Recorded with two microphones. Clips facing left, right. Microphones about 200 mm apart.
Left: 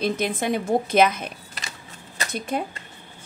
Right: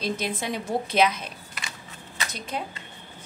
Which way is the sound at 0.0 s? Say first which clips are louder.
Left 5 dB; 50° left (ahead or behind).